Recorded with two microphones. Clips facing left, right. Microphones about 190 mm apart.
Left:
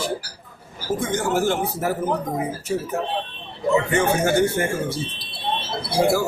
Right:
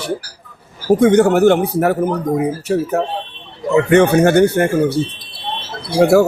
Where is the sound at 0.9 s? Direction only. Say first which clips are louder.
Right 12 dB; 65° right (ahead or behind).